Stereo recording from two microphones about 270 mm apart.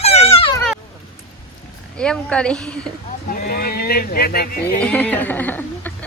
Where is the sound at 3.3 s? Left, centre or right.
Left.